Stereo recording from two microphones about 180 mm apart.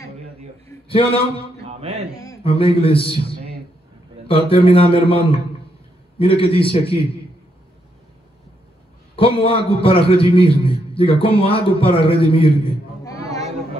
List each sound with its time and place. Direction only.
0.8 s a man's voice: 30° left (ahead or behind)
1.7 s music: 35° right (ahead or behind)
2.4 s a man's voice: 30° left (ahead or behind)
9.1 s a man's voice: 30° left (ahead or behind)
13.0 s a sound: 20° left (ahead or behind)